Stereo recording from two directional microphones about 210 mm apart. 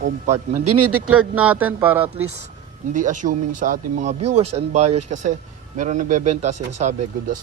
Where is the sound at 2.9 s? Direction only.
35° right (ahead or behind).